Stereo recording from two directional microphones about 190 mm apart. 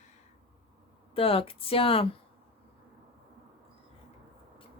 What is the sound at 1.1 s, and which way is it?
Speech, 30° left (ahead or behind).